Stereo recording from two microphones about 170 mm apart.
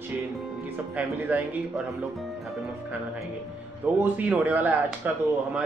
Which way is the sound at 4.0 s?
10° right (ahead or behind).